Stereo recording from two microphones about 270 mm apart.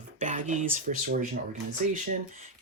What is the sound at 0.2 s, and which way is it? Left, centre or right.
Speech, right.